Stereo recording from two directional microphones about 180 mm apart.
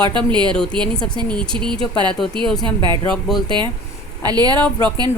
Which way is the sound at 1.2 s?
5° left (ahead or behind).